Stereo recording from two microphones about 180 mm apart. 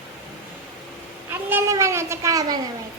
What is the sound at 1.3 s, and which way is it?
A child's voice, 10° right (ahead or behind).